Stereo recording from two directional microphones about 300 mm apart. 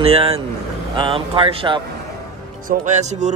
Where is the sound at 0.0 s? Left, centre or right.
Centre.